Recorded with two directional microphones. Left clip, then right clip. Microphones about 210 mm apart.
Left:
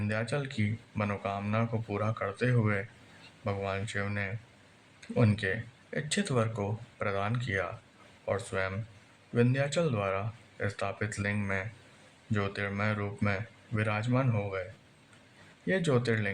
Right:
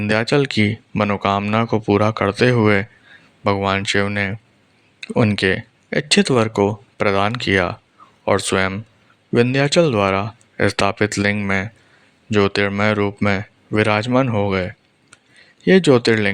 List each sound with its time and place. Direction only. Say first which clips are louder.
0.1 s speech: right 18 dB; 45° right (ahead or behind)